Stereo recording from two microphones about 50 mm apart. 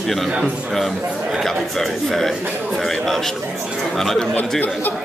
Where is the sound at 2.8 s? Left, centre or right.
Centre.